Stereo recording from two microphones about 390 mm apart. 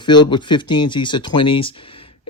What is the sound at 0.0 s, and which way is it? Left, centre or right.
Speech, centre.